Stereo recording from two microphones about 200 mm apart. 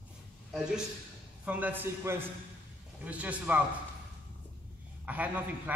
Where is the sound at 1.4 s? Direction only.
10° right (ahead or behind).